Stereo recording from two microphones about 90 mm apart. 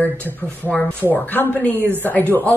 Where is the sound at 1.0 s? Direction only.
20° left (ahead or behind).